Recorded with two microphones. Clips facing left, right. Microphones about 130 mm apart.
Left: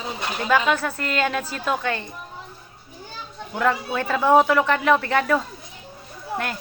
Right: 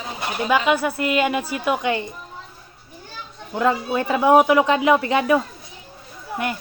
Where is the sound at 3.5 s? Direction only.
15° right (ahead or behind).